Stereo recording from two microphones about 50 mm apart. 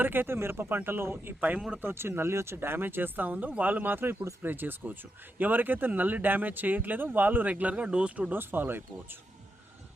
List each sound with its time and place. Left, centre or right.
0.0 s speech: right
1.4 s speech: right
1.8 s speech: right
8.3 s speech: right